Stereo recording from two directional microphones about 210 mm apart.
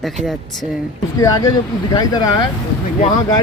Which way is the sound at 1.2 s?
15° left (ahead or behind).